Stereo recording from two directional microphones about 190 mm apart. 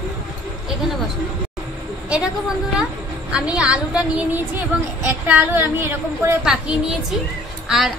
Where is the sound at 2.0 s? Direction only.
5° right (ahead or behind).